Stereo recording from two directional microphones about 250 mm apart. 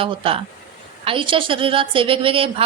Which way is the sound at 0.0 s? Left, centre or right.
Right.